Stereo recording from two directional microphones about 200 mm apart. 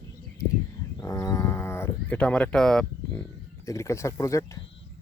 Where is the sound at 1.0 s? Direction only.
15° left (ahead or behind).